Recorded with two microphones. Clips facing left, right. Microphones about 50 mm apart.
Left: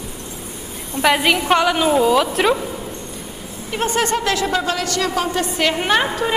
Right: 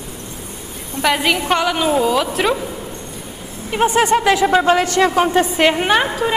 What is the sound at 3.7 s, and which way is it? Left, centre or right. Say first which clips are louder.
A woman's voice: right 5 dB; centre.